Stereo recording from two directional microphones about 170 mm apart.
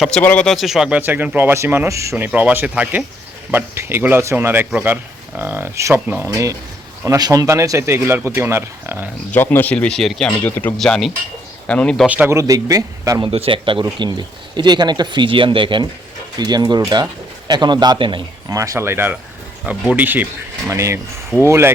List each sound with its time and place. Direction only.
0.0 s speech: 5° left (ahead or behind); by 9.0 s 15° right (ahead or behind)
9.3 s speech: 10° left (ahead or behind)
12.0 s speech: 10° right (ahead or behind)
13.3 s speech: 30° right (ahead or behind); by 21.7 s 15° right (ahead or behind)